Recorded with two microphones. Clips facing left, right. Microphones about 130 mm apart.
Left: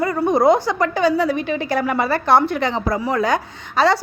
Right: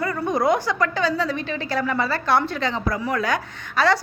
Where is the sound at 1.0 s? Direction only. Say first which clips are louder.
Left 6 dB; 15° left (ahead or behind).